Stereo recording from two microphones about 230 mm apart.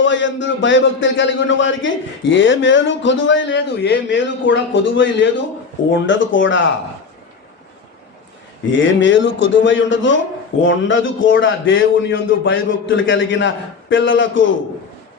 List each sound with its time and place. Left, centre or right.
0.0 s a man's voice: left
8.7 s a man's voice: left